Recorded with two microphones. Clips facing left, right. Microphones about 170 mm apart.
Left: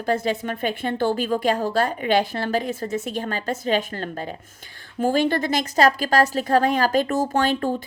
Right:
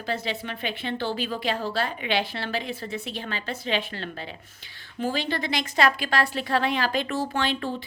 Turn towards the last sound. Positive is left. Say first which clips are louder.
# left 6 dB
turn(degrees=45)  # may be behind; listen again after turning